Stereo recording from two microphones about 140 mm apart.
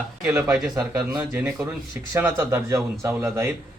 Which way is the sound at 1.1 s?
15° right (ahead or behind).